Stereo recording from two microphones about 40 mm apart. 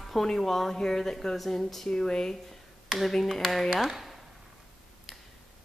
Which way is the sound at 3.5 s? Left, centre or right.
Centre.